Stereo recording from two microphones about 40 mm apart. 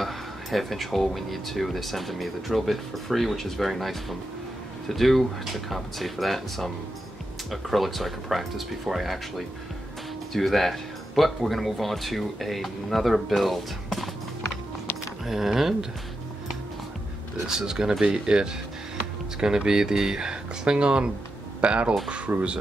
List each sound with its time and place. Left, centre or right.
0.0 s speech: centre
10.3 s speech: centre
15.2 s speech: centre
17.5 s speech: centre; by 21.9 s right
22.3 s speech: right